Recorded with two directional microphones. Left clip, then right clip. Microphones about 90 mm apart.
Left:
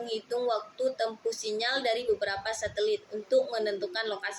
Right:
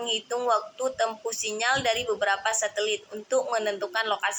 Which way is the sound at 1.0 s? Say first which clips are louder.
Right 3 dB; 20° left (ahead or behind).